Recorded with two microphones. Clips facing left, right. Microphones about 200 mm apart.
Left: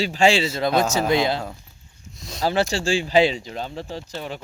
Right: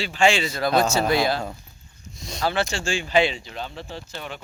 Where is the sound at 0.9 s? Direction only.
20° left (ahead or behind).